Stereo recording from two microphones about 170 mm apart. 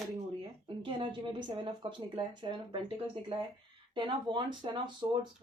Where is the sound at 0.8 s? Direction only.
30° right (ahead or behind).